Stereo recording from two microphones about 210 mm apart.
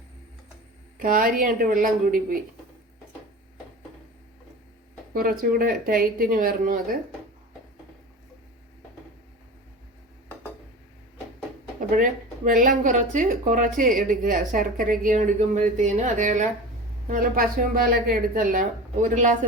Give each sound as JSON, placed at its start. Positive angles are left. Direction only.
{"t": 0.9, "sound": "speech", "side_deg": -40}
{"t": 5.1, "sound": "speech", "side_deg": -40}
{"t": 11.9, "sound": "speech", "side_deg": -40}